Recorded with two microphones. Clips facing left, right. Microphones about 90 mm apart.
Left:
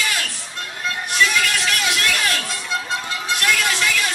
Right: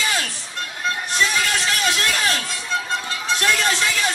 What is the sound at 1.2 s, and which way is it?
Music, 30° right (ahead or behind).